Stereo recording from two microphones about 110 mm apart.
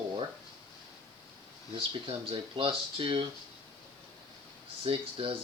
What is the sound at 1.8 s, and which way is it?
Speech, 60° right (ahead or behind).